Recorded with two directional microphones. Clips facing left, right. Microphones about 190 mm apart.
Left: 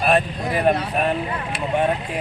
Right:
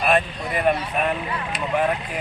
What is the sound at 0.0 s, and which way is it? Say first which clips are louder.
Speech: left 2 dB; 35° left (ahead or behind).